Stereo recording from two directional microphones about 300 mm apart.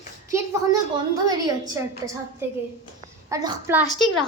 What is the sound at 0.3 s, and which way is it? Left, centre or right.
A child's voice, centre.